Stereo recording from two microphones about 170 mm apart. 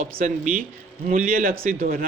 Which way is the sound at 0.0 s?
50° right (ahead or behind).